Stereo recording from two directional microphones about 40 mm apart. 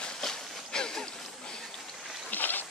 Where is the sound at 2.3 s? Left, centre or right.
Left.